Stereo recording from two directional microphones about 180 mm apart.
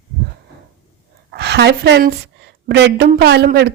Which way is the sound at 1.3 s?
65° right (ahead or behind).